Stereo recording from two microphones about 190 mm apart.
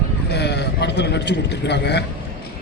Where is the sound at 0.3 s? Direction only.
60° left (ahead or behind).